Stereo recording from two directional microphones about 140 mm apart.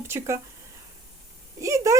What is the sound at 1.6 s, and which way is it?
Speech, 20° right (ahead or behind).